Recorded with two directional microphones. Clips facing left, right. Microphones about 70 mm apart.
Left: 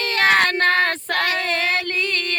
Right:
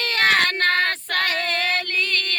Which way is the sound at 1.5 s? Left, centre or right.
Left.